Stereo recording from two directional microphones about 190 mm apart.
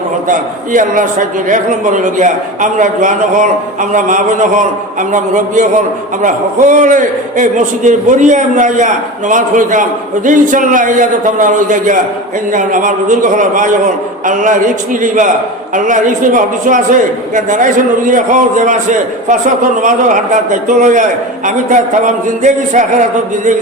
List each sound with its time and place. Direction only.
0.3 s a man's voice: 45° right (ahead or behind)